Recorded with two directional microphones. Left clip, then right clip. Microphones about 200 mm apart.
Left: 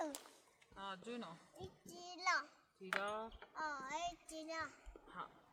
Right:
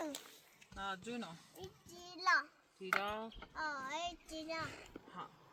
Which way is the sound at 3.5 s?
60° left (ahead or behind).